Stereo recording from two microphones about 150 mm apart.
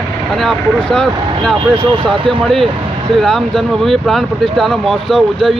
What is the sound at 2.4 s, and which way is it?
Speech, centre (ahead or behind).